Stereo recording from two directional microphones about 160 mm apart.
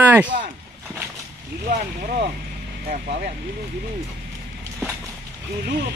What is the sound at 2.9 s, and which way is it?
Speech, 60° right (ahead or behind).